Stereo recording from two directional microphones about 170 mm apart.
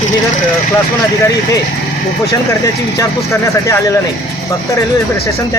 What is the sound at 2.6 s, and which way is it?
Speech, 20° left (ahead or behind).